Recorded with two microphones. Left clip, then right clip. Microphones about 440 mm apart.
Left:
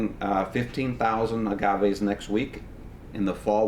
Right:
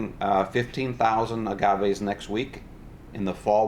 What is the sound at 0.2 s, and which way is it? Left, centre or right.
Speech, right.